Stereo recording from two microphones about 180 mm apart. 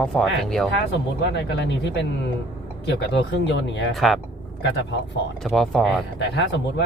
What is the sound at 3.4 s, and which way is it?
Speech, 75° left (ahead or behind).